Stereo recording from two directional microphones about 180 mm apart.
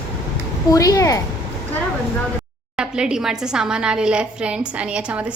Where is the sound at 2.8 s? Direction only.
5° right (ahead or behind).